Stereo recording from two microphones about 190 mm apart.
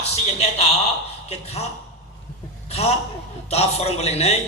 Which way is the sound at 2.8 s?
35° left (ahead or behind).